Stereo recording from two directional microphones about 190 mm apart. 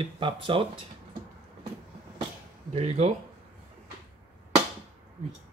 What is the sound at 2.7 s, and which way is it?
Speech, 35° right (ahead or behind).